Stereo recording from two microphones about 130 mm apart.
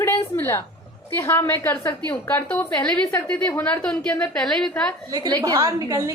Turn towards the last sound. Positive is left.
turn(degrees=-25)  # may be behind; listen again after turning